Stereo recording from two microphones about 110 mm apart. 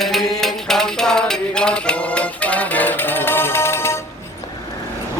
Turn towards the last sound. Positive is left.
turn(degrees=25)  # may be behind; listen again after turning